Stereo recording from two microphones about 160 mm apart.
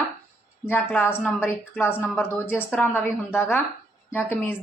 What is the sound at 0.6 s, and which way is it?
A woman's voice, 10° left (ahead or behind).